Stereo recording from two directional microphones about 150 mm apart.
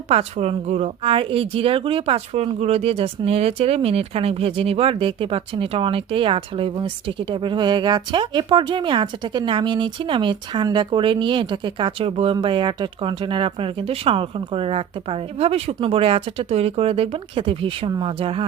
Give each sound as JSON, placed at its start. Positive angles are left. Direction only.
{"t": 0.1, "sound": "speech", "side_deg": -45}